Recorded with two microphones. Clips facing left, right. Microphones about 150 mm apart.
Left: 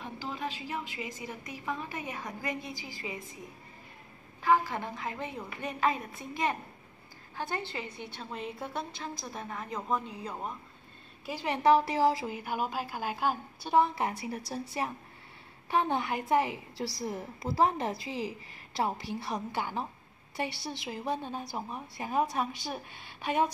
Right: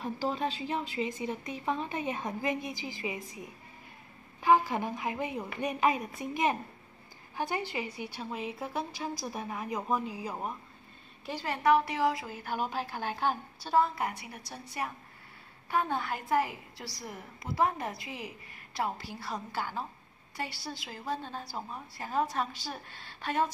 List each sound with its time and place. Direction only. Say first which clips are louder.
0.0 s a woman's voice: right 5 dB; 35° right (ahead or behind); by 3.2 s 20° right (ahead or behind)
4.4 s a woman's voice: right 2 dB; 15° right (ahead or behind)
11.2 s a woman's voice: left 2 dB; 15° left (ahead or behind)
12.3 s a woman's voice: left 1 dB; 10° left (ahead or behind)
13.7 s a woman's voice: left 1 dB; 20° left (ahead or behind)